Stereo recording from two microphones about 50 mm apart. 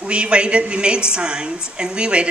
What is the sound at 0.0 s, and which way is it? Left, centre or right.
A woman's voice, right.